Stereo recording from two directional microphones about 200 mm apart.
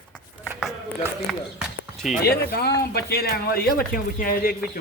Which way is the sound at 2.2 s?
50° left (ahead or behind).